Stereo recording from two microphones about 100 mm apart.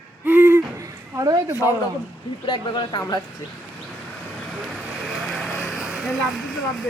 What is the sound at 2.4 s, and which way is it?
Speech, 50° left (ahead or behind).